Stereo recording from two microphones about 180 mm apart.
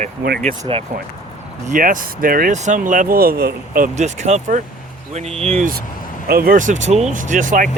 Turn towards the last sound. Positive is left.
turn(degrees=-45)  # may be behind; listen again after turning